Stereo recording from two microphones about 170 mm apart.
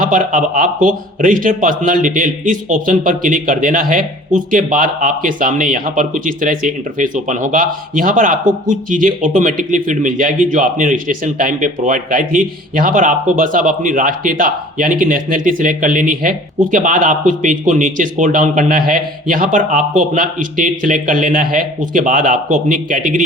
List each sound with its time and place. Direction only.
0.0 s a man's voice: 50° right (ahead or behind)